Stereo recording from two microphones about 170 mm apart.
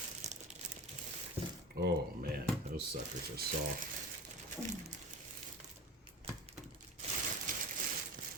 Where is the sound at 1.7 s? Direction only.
70° right (ahead or behind).